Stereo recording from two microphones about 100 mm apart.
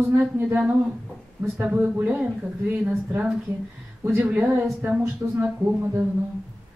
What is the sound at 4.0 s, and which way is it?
Speech, 20° right (ahead or behind).